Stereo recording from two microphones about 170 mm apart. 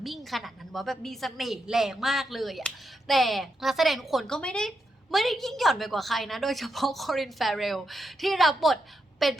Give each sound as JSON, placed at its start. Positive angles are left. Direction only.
{"t": 0.0, "sound": "a woman's voice", "side_deg": 0}